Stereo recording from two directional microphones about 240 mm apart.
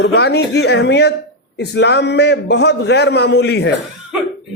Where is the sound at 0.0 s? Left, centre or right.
Left.